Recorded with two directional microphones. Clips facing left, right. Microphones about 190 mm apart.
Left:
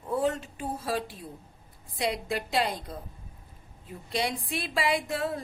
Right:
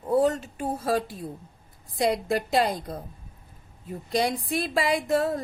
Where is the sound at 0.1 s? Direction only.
40° right (ahead or behind).